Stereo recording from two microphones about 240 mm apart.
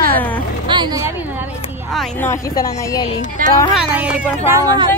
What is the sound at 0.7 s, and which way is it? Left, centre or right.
Speech, centre.